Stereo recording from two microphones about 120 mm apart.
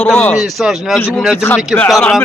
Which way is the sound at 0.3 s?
Centre (ahead or behind).